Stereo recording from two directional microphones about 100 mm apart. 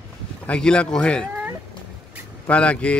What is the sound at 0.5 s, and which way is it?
Speech, 10° left (ahead or behind).